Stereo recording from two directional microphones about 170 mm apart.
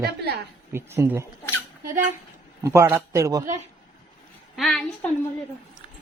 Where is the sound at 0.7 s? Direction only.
15° right (ahead or behind).